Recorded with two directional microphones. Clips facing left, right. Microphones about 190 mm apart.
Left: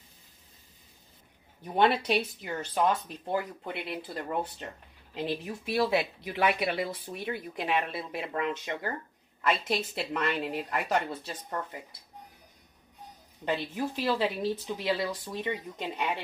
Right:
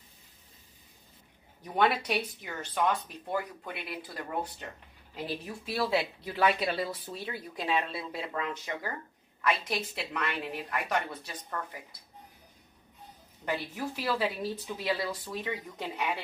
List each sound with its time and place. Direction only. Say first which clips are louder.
1.8 s speech: left 3 dB; 30° left (ahead or behind)
13.5 s speech: left 3 dB; 20° left (ahead or behind)